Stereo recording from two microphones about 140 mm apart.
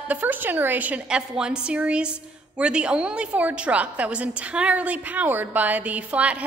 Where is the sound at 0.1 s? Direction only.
10° right (ahead or behind).